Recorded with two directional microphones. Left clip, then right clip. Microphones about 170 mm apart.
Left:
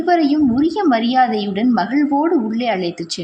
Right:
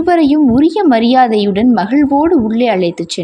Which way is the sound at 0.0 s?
35° right (ahead or behind).